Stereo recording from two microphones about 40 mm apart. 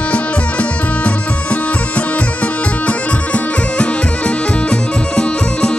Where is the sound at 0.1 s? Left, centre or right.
Left.